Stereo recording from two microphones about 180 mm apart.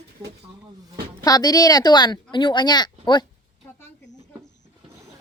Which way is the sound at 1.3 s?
20° left (ahead or behind).